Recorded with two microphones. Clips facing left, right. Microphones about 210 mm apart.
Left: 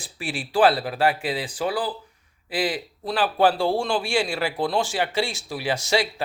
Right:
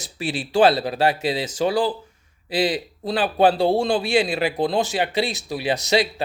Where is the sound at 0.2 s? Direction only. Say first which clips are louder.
Right 2 dB; 25° right (ahead or behind).